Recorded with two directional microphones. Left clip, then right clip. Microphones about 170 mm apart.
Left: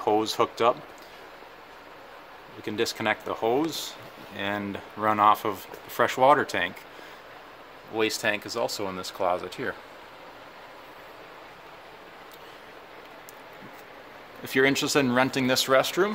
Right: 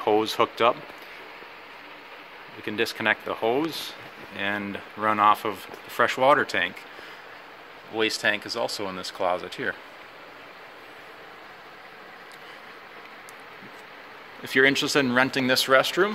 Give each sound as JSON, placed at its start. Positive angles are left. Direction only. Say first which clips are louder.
{"t": 0.0, "sound": "speech", "louder": "right 2 dB", "side_deg": 0}
{"t": 2.6, "sound": "speech", "louder": "right 2 dB", "side_deg": 10}
{"t": 7.9, "sound": "speech", "louder": "right 2 dB", "side_deg": 15}
{"t": 14.4, "sound": "speech", "louder": "right 3 dB", "side_deg": 15}